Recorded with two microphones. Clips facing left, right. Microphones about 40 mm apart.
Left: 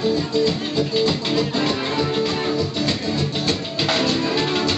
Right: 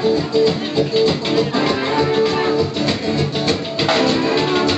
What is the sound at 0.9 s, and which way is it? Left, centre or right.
Music, centre.